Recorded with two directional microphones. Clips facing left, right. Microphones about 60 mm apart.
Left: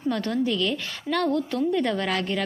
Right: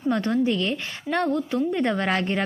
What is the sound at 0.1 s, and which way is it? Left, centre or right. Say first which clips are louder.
A woman's voice: right 3 dB; right.